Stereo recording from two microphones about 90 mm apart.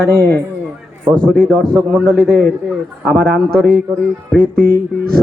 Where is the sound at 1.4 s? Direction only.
Centre (ahead or behind).